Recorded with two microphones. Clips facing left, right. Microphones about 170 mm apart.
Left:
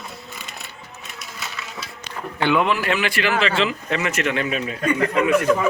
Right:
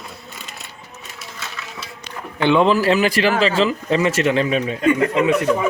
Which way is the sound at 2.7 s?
35° right (ahead or behind).